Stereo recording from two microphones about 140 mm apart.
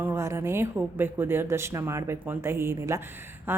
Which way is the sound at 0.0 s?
20° right (ahead or behind).